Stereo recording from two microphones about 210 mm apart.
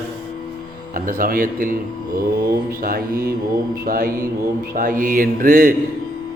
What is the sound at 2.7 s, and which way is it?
A man's voice, 40° right (ahead or behind).